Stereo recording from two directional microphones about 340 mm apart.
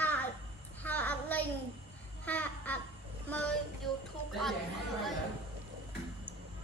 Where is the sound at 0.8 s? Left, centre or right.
Centre.